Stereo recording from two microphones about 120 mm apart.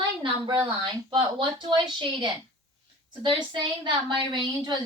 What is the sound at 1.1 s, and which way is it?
A woman's voice, 40° right (ahead or behind).